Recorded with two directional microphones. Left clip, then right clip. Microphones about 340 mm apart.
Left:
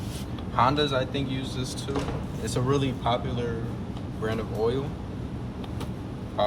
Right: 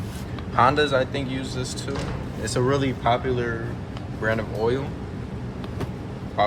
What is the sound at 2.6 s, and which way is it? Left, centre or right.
Speech, right.